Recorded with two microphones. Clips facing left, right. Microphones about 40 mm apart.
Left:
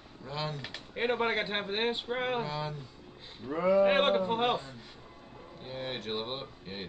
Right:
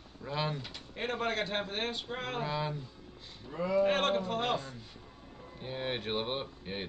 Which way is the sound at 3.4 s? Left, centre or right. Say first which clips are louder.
Left 5 dB; left.